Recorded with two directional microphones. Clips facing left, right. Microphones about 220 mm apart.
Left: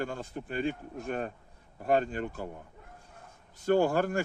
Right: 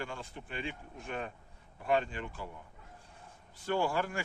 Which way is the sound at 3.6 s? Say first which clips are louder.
Left 7 dB; 45° left (ahead or behind).